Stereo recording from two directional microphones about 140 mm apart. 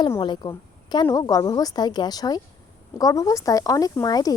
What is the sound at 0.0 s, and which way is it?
Speech, 35° left (ahead or behind).